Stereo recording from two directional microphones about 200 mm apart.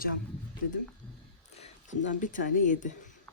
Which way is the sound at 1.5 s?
35° left (ahead or behind).